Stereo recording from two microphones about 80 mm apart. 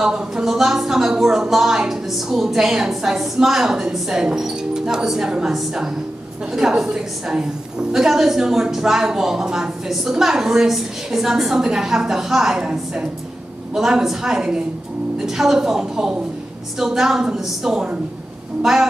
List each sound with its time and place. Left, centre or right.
0.0 s a woman's voice: centre